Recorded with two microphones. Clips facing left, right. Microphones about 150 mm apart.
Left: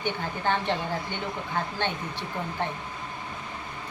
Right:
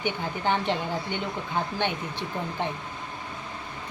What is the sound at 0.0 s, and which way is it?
Speech, 15° right (ahead or behind).